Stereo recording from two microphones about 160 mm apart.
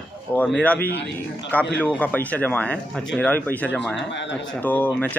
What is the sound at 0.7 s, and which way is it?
Speech, 80° left.